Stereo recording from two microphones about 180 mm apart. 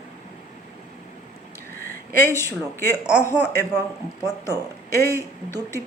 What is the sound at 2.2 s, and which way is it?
Speech, 15° left (ahead or behind).